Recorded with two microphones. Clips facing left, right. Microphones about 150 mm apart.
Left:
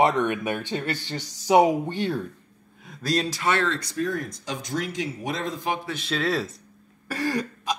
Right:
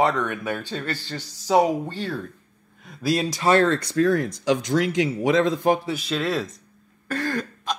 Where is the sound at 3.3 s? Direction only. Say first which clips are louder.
Right 6 dB; 40° right (ahead or behind).